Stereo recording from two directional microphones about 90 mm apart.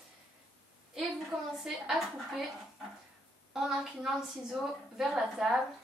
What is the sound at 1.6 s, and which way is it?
Speech, centre (ahead or behind).